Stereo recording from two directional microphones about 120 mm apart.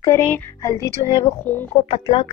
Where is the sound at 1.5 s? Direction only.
15° left (ahead or behind).